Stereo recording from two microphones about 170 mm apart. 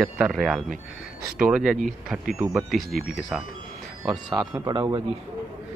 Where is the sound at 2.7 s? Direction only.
Centre (ahead or behind).